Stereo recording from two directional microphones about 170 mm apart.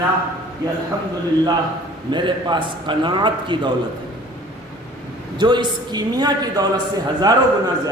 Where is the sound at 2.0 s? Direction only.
25° right (ahead or behind).